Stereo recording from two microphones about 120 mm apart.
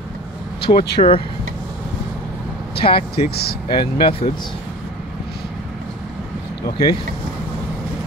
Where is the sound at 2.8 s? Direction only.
50° left (ahead or behind).